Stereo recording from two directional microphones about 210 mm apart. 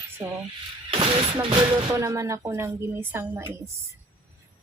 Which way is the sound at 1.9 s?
15° right (ahead or behind).